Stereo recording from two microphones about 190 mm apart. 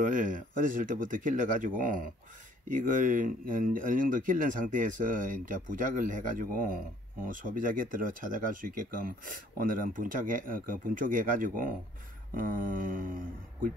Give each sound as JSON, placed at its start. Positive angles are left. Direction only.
{"t": 0.0, "sound": "speech", "side_deg": -45}